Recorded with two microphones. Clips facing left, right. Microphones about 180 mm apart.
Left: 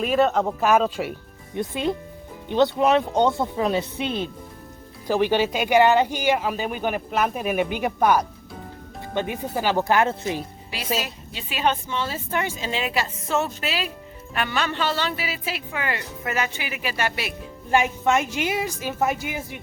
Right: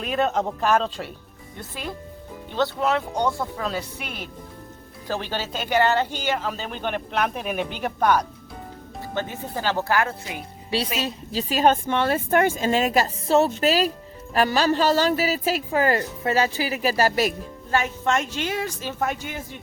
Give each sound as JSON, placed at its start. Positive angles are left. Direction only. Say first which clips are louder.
{"t": 0.0, "sound": "a woman's voice", "louder": "left 3 dB", "side_deg": 0}
{"t": 1.5, "sound": "speech", "louder": "left 9 dB", "side_deg": 20}
{"t": 11.0, "sound": "speech", "louder": "right 7 dB", "side_deg": -35}
{"t": 17.7, "sound": "speech", "louder": "left 3 dB", "side_deg": 15}